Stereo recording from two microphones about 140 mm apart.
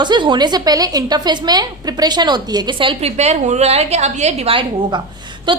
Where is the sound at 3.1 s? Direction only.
55° right (ahead or behind).